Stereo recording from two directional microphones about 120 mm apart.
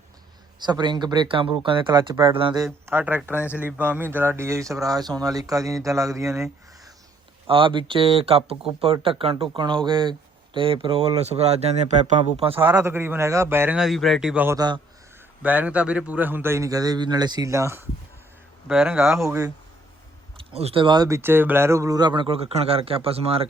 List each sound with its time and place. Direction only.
0.6 s speech: 40° right (ahead or behind)
2.8 s speech: 15° right (ahead or behind)
7.4 s speech: 45° right (ahead or behind)
9.5 s speech: 40° right (ahead or behind); by 12.5 s 75° right (ahead or behind)
12.8 s speech: 20° right (ahead or behind)
13.7 s speech: centre (ahead or behind); by 17.8 s 25° right (ahead or behind)
19.2 s speech: 25° right (ahead or behind)
20.4 s speech: 55° right (ahead or behind)
20.8 s speech: 35° right (ahead or behind)
21.1 s speech: 20° right (ahead or behind); by 23.5 s 55° right (ahead or behind)